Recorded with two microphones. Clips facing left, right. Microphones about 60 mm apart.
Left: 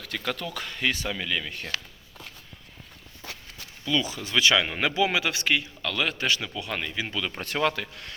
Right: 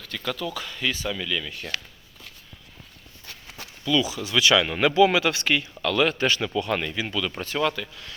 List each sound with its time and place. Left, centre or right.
0.0 s a sound: left
0.3 s speech: left
1.0 s speech: left
3.6 s a sound: right
4.0 s speech: left
4.4 s speech: left
4.6 s speech: centre
5.8 s a man's voice: centre
6.9 s speech: centre
7.8 s speech: left